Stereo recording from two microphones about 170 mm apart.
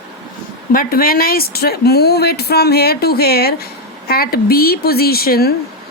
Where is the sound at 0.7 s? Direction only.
60° left (ahead or behind).